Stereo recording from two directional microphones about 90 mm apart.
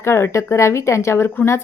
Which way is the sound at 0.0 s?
30° left (ahead or behind).